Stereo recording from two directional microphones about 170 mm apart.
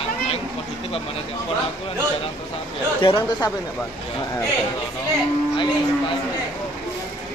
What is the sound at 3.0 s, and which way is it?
Speech, 30° left (ahead or behind).